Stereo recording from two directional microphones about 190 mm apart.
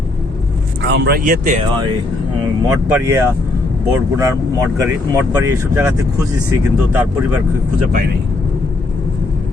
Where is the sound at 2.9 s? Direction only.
15° right (ahead or behind).